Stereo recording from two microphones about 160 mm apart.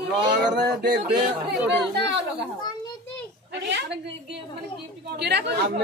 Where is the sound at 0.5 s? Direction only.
90° right.